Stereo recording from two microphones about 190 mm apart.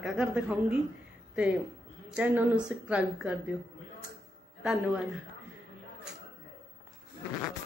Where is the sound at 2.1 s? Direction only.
5° right (ahead or behind).